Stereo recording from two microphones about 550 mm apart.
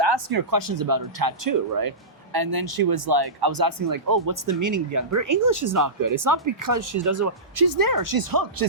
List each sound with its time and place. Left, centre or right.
0.0 s speech: right